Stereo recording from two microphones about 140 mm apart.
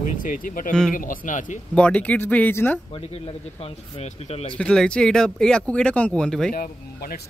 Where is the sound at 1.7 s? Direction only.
10° left (ahead or behind).